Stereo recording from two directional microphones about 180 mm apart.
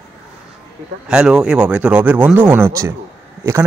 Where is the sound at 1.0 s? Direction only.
5° right (ahead or behind).